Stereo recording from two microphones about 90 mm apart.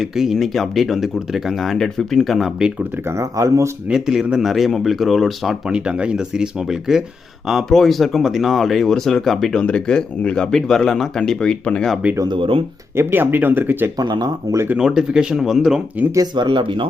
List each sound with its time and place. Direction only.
0.0 s speech: centre (ahead or behind)
3.1 s speech: 35° right (ahead or behind)
3.8 s speech: 5° right (ahead or behind)
12.3 s speech: 75° right (ahead or behind)
13.0 s speech: 25° right (ahead or behind)
14.0 s speech: 50° right (ahead or behind)
14.5 s speech: 40° right (ahead or behind)
14.8 s speech: 5° right (ahead or behind)
16.1 s speech: 50° right (ahead or behind); by 16.9 s 65° right (ahead or behind)